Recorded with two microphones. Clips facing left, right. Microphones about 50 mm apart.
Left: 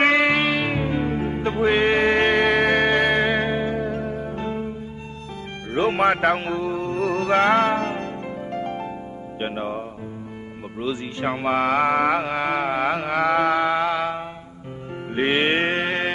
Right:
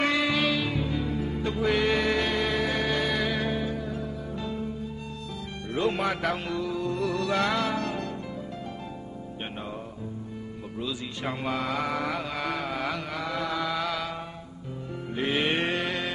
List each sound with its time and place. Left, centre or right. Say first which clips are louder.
0.0 s music: left 7 dB; left
5.7 s music: left 8 dB; left
8.5 s music: left 10 dB; left
9.4 s music: left 11 dB; left
10.8 s music: left 8 dB; left